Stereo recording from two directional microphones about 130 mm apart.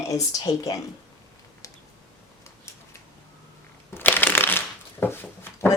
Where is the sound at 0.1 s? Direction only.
25° left (ahead or behind).